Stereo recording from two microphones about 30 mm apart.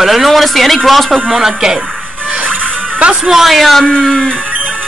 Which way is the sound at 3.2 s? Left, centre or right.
Centre.